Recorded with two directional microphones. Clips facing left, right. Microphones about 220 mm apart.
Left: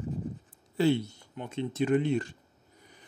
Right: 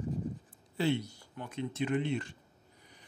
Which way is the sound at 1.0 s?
25° left (ahead or behind).